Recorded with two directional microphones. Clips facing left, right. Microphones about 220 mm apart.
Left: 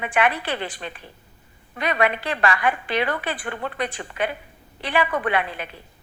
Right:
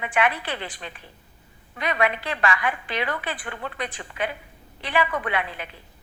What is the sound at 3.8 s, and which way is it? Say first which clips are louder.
A woman's voice: left 3 dB; 65° left (ahead or behind).